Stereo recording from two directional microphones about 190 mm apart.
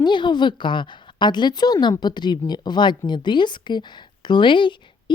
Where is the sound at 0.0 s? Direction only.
25° left (ahead or behind).